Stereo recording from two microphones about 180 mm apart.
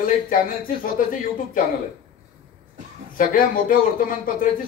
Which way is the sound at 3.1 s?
50° left (ahead or behind).